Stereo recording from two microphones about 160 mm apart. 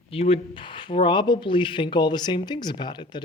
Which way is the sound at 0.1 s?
35° left (ahead or behind).